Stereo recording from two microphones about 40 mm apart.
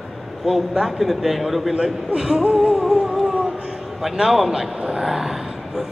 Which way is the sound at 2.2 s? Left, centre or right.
Centre.